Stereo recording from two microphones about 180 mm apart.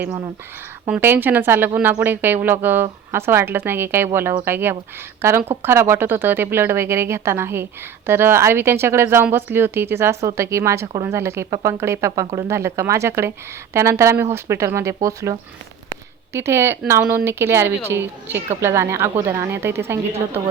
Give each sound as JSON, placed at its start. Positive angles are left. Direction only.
{"t": 0.9, "sound": "speech", "side_deg": -10}